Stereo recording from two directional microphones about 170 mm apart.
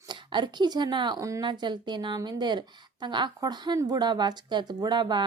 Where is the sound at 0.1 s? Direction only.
25° right (ahead or behind).